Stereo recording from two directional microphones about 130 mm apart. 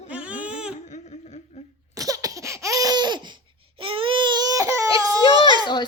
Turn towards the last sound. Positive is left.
turn(degrees=-35)  # may be behind; listen again after turning